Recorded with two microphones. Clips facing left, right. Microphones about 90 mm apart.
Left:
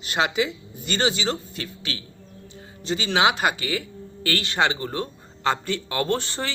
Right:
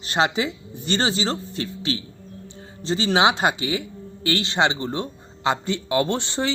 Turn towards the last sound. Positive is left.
turn(degrees=-20)  # may be behind; listen again after turning